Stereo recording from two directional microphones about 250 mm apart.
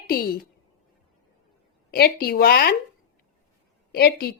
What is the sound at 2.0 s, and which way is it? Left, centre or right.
Speech, left.